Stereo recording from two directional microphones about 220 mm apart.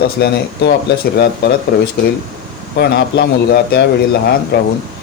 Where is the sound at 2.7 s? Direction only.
45° left (ahead or behind).